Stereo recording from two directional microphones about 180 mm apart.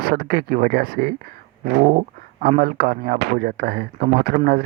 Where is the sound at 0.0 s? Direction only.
60° right (ahead or behind).